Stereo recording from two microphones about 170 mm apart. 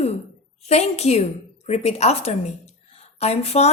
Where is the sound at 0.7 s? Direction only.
40° left (ahead or behind).